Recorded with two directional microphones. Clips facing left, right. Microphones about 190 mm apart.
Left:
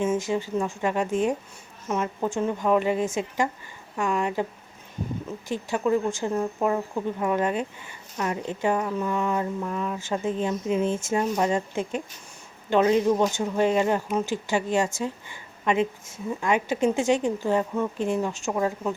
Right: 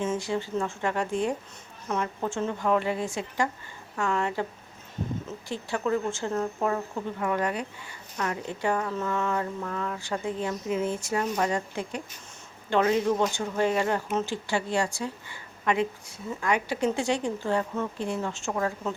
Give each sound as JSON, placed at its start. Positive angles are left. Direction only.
{"t": 0.0, "sound": "a woman's voice", "side_deg": 15}
{"t": 5.5, "sound": "a woman's voice", "side_deg": 15}